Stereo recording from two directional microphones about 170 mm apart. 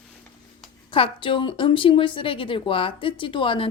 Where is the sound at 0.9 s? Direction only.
30° left (ahead or behind).